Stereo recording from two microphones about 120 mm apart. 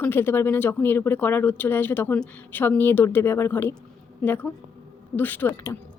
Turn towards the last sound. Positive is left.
turn(degrees=15)  # may be behind; listen again after turning